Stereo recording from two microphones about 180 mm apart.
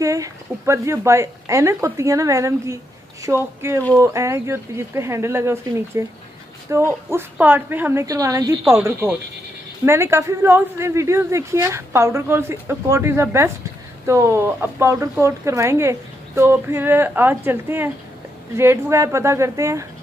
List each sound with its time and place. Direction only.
0.0 s speech: 20° right (ahead or behind)